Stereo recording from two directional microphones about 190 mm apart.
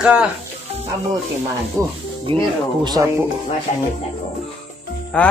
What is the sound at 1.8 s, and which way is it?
Speech, 15° right (ahead or behind).